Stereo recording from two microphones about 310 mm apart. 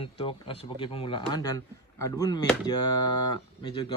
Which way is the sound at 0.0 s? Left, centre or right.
Centre.